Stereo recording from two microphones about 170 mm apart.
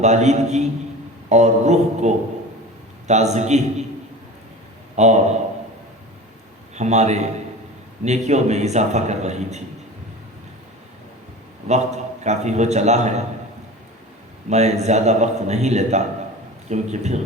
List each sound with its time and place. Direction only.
0.0 s a man's voice: 40° right (ahead or behind)
4.9 s a man's voice: 40° right (ahead or behind)
6.7 s a man's voice: 40° right (ahead or behind)
11.7 s a man's voice: 40° right (ahead or behind)
14.5 s a man's voice: 40° right (ahead or behind)